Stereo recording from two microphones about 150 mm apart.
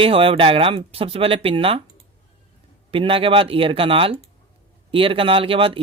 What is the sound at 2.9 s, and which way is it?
Speech, 35° right (ahead or behind).